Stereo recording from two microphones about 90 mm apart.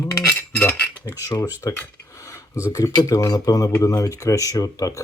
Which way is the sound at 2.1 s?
35° left (ahead or behind).